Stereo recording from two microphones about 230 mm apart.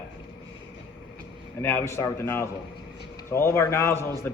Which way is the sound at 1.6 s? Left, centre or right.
Centre.